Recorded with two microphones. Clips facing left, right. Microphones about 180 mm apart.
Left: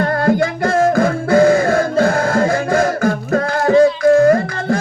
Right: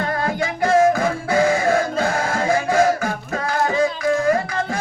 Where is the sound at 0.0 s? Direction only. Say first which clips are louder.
Left 8 dB; 55° left (ahead or behind).